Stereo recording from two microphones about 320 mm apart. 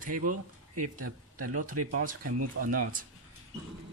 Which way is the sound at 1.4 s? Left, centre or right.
Right.